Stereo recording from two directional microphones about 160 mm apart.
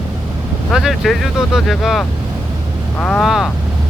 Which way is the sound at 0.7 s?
Centre (ahead or behind).